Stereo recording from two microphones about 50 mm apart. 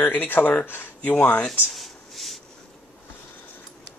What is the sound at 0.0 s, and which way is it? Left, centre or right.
Speech, left.